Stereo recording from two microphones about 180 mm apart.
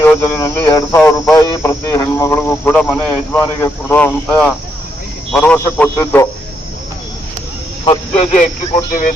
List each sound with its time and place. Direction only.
0.0 s speech: 15° left (ahead or behind)
7.9 s a man's voice: 35° left (ahead or behind)